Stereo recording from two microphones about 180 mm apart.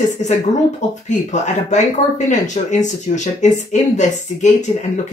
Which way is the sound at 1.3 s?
40° left (ahead or behind).